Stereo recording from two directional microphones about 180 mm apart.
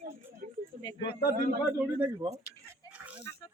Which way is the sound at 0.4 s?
55° right (ahead or behind).